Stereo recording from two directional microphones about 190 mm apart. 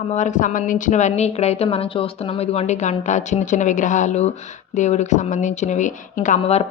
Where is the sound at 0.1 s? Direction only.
40° left (ahead or behind).